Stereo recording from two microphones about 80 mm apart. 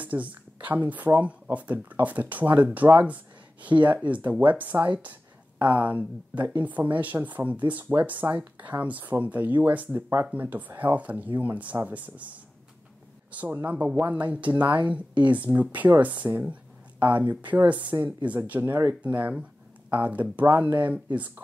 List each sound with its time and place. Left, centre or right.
0.0 s a woman's voice: centre